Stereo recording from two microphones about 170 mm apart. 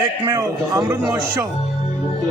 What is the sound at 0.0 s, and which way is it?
A man's voice, 20° right (ahead or behind).